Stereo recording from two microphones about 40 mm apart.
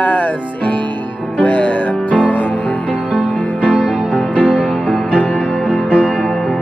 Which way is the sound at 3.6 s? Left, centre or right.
Left.